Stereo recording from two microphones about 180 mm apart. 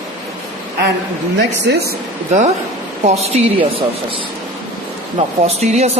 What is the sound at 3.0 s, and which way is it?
Speech, 35° right (ahead or behind).